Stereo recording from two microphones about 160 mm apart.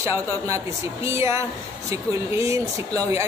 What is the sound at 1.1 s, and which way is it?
Speech, 15° right (ahead or behind).